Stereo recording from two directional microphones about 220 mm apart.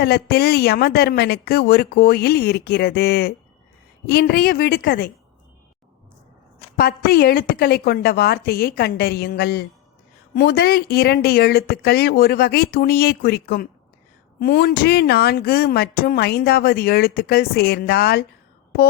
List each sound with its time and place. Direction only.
0.0 s speech: 45° left (ahead or behind)
6.7 s speech: 45° left (ahead or behind)